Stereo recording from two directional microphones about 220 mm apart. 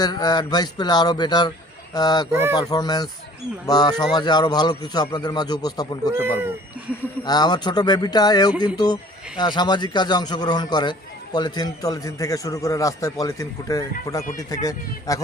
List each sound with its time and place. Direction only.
0.0 s a man's voice: 20° left (ahead or behind)
6.1 s speech: 10° right (ahead or behind)
7.3 s a man's voice: 20° left (ahead or behind)